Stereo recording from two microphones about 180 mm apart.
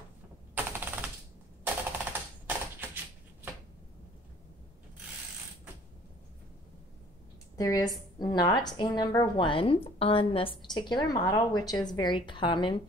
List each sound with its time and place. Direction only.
0.6 s a sound: 10° right (ahead or behind)
2.4 s typewriter: 10° right (ahead or behind)
7.5 s a woman's voice: 20° left (ahead or behind)